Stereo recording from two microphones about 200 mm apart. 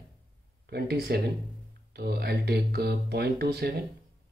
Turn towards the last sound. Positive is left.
turn(degrees=-55)  # may be behind; listen again after turning